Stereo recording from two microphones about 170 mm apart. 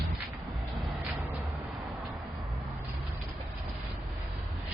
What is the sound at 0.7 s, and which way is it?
Music, centre (ahead or behind).